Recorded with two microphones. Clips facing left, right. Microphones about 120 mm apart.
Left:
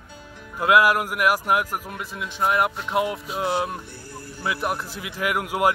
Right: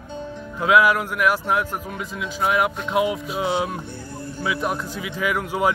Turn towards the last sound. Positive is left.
turn(degrees=10)  # may be behind; listen again after turning